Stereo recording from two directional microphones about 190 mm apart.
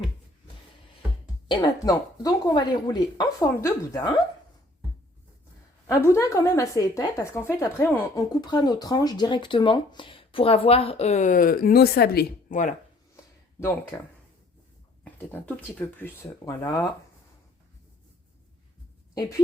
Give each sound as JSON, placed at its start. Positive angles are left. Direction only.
{"t": 1.5, "sound": "speech", "side_deg": 20}
{"t": 5.9, "sound": "a woman's voice", "side_deg": 15}
{"t": 8.3, "sound": "speech", "side_deg": 20}
{"t": 13.9, "sound": "a woman's voice", "side_deg": 15}